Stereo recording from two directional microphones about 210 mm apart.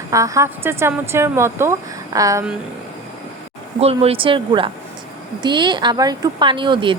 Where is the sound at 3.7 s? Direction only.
30° right (ahead or behind).